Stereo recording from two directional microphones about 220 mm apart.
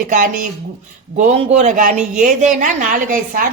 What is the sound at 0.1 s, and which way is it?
A woman's voice, 35° right (ahead or behind).